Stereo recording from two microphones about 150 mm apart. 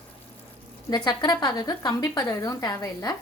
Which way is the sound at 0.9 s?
30° left (ahead or behind).